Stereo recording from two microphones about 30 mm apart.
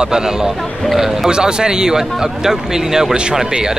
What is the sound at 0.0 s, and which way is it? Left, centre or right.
A man's voice, right.